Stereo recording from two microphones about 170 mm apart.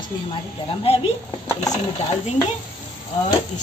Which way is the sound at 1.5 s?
20° left (ahead or behind).